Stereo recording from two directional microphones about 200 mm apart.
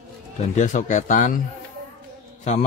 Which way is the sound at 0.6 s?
40° left (ahead or behind).